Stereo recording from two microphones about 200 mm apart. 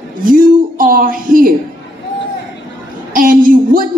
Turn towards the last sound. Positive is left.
turn(degrees=-45)  # may be behind; listen again after turning